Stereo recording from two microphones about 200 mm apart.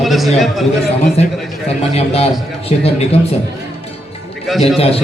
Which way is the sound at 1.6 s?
30° left (ahead or behind).